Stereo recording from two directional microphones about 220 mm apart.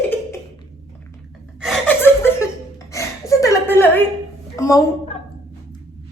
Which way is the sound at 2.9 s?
15° left (ahead or behind).